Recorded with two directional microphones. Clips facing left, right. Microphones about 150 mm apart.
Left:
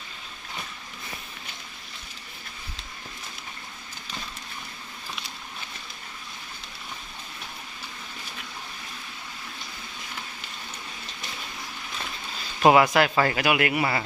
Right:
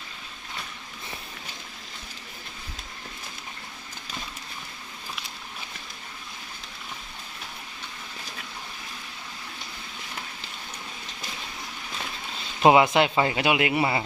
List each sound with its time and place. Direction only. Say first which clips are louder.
12.6 s speech: even; 20° right (ahead or behind)